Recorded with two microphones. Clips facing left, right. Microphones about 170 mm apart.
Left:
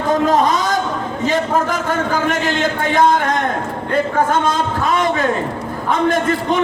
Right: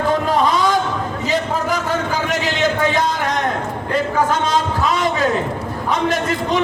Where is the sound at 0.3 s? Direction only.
45° left (ahead or behind).